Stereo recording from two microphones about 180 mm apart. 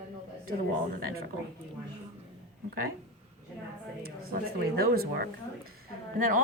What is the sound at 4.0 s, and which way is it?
Speech, 55° right (ahead or behind).